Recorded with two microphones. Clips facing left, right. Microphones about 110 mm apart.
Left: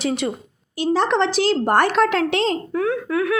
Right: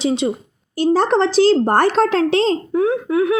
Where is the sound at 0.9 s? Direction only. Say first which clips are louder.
Right 3 dB; 35° right (ahead or behind).